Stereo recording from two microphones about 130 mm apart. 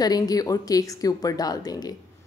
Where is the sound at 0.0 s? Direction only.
30° left (ahead or behind).